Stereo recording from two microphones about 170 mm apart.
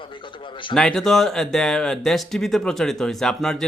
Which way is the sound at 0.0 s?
30° left (ahead or behind).